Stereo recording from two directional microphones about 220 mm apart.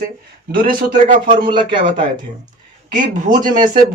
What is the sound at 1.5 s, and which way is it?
Speech, 20° right (ahead or behind).